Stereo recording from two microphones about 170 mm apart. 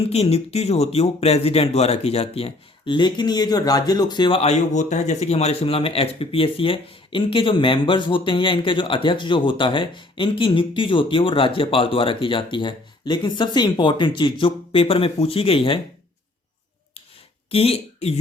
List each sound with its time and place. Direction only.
0.1 s speech: 35° left (ahead or behind)
17.5 s speech: 35° left (ahead or behind)